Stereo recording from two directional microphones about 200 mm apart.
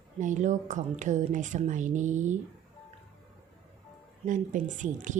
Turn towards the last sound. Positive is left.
turn(degrees=-40)  # may be behind; listen again after turning